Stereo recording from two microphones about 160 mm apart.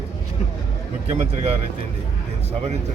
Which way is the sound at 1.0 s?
40° right (ahead or behind).